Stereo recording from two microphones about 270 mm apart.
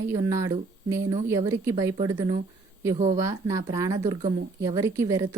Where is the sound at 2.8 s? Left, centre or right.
Right.